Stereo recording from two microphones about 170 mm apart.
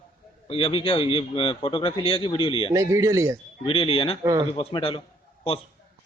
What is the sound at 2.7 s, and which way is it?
Speech, 20° right (ahead or behind).